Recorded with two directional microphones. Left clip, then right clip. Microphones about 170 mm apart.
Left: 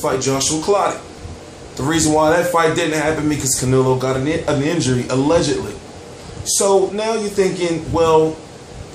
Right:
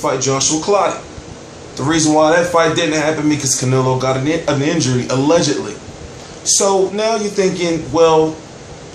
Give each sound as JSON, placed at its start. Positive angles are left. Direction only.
{"t": 0.0, "sound": "speech", "side_deg": 15}
{"t": 1.9, "sound": "speech", "side_deg": 15}